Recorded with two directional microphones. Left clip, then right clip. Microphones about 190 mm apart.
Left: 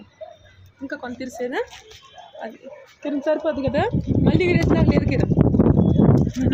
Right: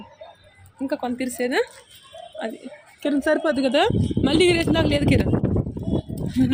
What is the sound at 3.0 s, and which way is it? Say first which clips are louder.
Speech: right 1 dB; 55° right (ahead or behind).